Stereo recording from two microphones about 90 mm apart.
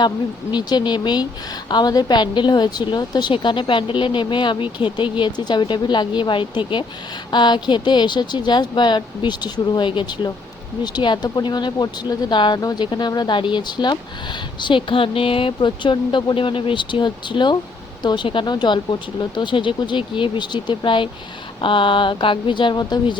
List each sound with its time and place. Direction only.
0.5 s a woman's voice: 55° left (ahead or behind)
14.6 s a woman's voice: 70° left (ahead or behind); by 23.1 s 50° left (ahead or behind)